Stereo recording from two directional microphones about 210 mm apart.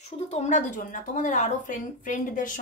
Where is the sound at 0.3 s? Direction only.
35° left (ahead or behind).